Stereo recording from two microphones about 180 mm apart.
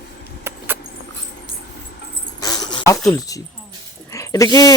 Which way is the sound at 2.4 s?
20° left (ahead or behind).